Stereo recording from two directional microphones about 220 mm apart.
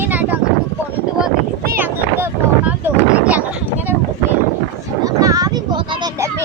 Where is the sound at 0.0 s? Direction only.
5° right (ahead or behind).